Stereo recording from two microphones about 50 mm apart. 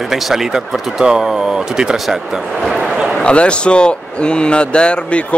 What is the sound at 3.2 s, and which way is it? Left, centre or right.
A man's voice, left.